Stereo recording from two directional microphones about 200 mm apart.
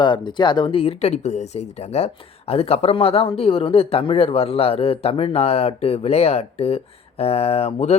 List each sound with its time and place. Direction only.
0.0 s speech: 25° left (ahead or behind)